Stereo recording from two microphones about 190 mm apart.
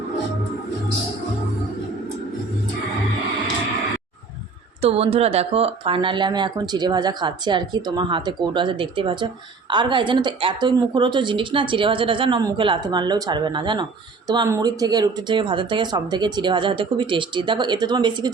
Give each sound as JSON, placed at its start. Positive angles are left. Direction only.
{"t": 4.8, "sound": "speech", "side_deg": -30}